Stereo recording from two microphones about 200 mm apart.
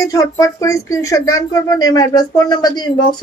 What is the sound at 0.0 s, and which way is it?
Speech, 15° left (ahead or behind).